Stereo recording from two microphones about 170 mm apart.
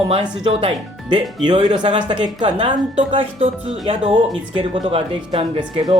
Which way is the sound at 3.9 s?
30° right (ahead or behind).